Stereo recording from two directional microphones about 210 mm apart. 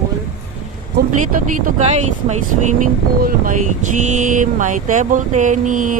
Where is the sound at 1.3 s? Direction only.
40° right (ahead or behind).